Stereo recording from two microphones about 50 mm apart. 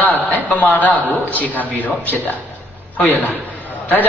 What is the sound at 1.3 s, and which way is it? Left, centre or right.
Speech, left.